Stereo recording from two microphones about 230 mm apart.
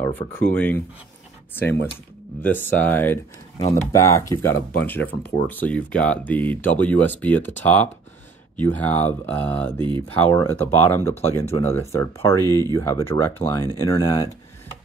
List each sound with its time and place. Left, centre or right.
0.0 s speech: centre
9.8 s speech: right
10.6 s speech: centre
11.4 s speech: left
11.8 s speech: centre
12.4 s speech: centre
12.7 s speech: centre
13.1 s speech: left